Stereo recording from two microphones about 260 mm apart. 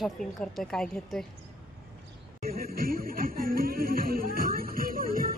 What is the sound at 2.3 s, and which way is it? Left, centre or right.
Music, right.